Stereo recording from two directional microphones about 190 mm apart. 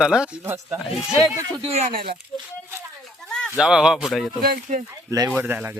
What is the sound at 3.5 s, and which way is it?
Speech, 5° right (ahead or behind).